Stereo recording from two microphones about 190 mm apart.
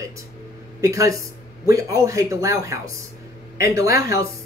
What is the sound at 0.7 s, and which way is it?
Speech, 15° right (ahead or behind).